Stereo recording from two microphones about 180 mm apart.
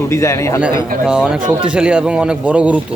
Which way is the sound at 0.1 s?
15° left (ahead or behind).